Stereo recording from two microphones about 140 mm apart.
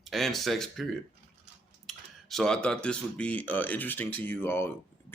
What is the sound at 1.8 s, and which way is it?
Speech, centre (ahead or behind).